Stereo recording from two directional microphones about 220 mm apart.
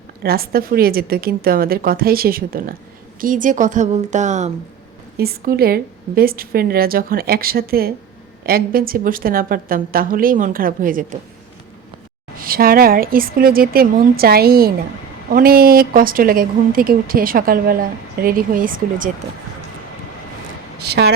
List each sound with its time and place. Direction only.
0.2 s a woman's voice: 45° right (ahead or behind)
5.1 s a woman's voice: 45° right (ahead or behind)
12.4 s speech: 40° right (ahead or behind)
20.7 s speech: 50° right (ahead or behind)